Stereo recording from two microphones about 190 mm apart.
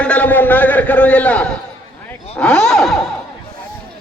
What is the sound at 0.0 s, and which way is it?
A man's voice, 5° left (ahead or behind).